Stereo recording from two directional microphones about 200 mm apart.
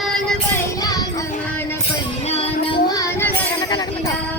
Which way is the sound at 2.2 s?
30° left (ahead or behind).